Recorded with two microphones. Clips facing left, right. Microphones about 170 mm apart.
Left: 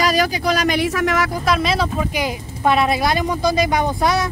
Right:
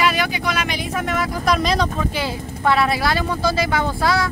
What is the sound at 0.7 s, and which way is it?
Speech, 85° left.